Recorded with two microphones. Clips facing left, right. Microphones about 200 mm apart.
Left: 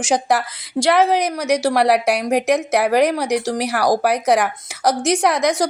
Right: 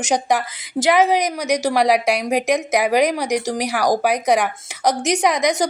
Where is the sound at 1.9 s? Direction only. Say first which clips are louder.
Left 1 dB; 10° right (ahead or behind).